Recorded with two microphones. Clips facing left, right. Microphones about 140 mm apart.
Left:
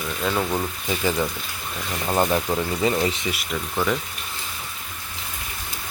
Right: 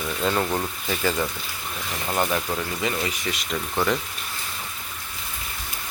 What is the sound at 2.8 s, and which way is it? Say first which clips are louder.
Speech: left 6 dB; 30° left (ahead or behind).